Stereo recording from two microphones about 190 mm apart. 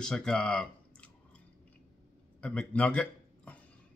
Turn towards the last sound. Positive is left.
turn(degrees=5)  # may be behind; listen again after turning